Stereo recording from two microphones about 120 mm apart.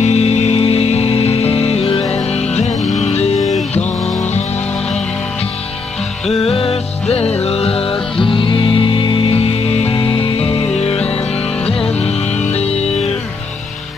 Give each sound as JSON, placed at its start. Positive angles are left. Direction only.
{"t": 0.0, "sound": "music", "side_deg": 65}
{"t": 6.5, "sound": "music", "side_deg": 50}
{"t": 9.4, "sound": "music", "side_deg": 55}
{"t": 12.5, "sound": "music", "side_deg": 60}